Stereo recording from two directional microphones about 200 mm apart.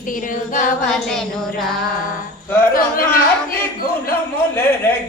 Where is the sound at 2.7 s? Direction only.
45° left (ahead or behind).